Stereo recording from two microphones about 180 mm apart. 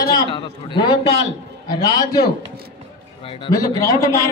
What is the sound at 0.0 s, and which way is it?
A man's voice, 20° left (ahead or behind).